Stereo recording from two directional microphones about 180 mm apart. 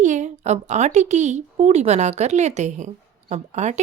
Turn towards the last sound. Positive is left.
turn(degrees=-40)  # may be behind; listen again after turning